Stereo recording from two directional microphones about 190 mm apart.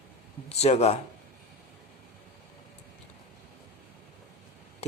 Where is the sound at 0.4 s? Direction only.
35° left (ahead or behind).